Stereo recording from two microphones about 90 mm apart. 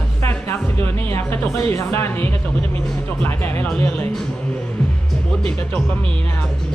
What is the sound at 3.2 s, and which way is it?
Music, 25° left (ahead or behind).